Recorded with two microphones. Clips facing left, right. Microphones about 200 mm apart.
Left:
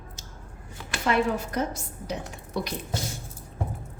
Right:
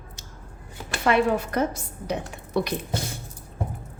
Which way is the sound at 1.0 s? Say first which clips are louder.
Right 4 dB; 60° right (ahead or behind).